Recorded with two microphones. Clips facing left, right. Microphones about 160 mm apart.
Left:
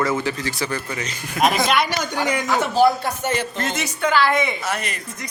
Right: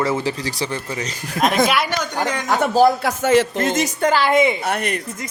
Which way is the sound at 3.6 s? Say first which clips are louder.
Right 5 dB; 40° right (ahead or behind).